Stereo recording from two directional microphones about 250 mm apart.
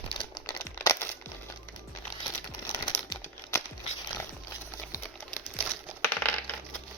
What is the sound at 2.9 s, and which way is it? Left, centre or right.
Crumpling, centre.